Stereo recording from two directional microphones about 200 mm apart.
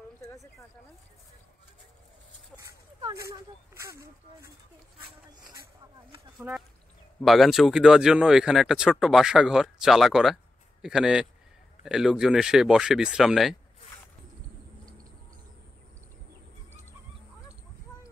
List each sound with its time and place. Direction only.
0.2 s a sound: 15° left (ahead or behind)
2.6 s speech: 15° right (ahead or behind)
6.3 s speech: 5° right (ahead or behind)